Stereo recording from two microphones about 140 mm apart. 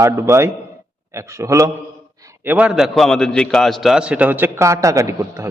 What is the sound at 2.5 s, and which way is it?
A man's voice, 10° right (ahead or behind).